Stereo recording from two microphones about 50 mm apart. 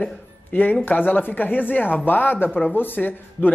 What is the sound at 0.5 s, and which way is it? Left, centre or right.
Speech, left.